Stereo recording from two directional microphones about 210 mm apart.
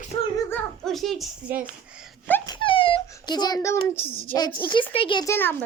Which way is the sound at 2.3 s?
10° left (ahead or behind).